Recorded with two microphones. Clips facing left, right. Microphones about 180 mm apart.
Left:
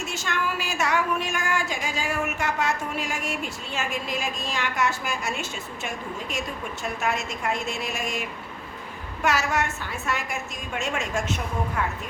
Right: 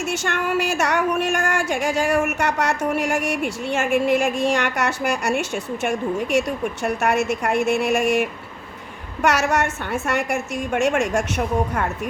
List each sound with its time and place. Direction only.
0.2 s a woman's voice: 70° right (ahead or behind)
11.8 s a woman's voice: 50° right (ahead or behind)